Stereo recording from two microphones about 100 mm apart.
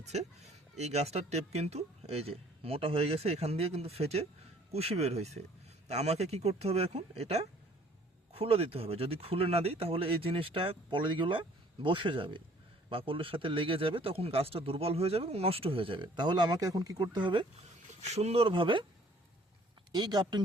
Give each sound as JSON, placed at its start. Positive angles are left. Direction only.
{"t": 0.0, "sound": "speech", "side_deg": -90}
{"t": 8.3, "sound": "speech", "side_deg": -75}
{"t": 18.1, "sound": "speech", "side_deg": -90}
{"t": 19.9, "sound": "speech", "side_deg": -45}